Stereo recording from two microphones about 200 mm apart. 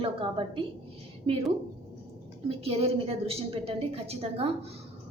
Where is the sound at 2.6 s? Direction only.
30° right (ahead or behind).